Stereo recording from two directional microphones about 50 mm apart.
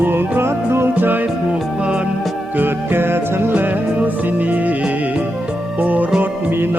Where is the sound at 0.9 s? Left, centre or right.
Right.